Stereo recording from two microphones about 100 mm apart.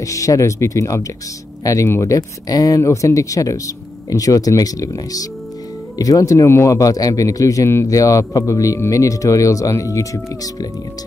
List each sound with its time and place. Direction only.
0.0 s a man's voice: 30° left (ahead or behind)